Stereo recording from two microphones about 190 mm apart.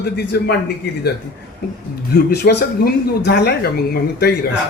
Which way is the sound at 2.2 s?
60° left (ahead or behind).